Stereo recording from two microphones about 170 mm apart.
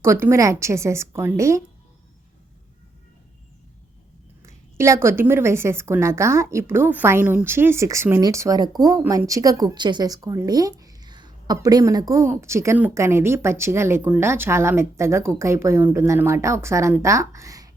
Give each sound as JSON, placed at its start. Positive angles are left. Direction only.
{"t": 0.0, "sound": "a woman's voice", "side_deg": -15}
{"t": 4.4, "sound": "a woman's voice", "side_deg": -15}